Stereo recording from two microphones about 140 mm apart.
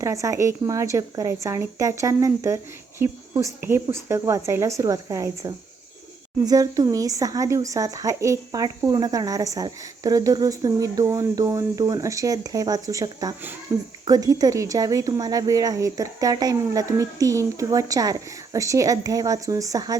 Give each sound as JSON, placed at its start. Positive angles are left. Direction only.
{"t": 0.0, "sound": "speech", "side_deg": -20}